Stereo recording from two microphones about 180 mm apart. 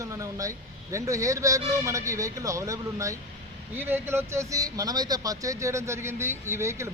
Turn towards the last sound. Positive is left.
turn(degrees=-15)  # may be behind; listen again after turning